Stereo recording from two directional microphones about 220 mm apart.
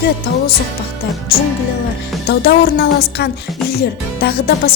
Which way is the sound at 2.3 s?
45° left (ahead or behind).